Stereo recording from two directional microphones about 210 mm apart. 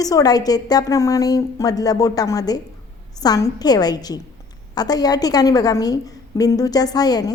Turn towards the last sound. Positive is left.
turn(degrees=20)  # may be behind; listen again after turning